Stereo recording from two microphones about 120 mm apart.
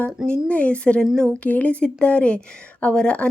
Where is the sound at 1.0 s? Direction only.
Centre (ahead or behind).